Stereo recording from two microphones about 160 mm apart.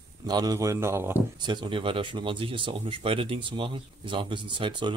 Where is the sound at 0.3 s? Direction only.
25° right (ahead or behind).